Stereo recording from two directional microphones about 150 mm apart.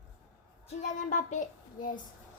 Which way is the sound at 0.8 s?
55° left (ahead or behind).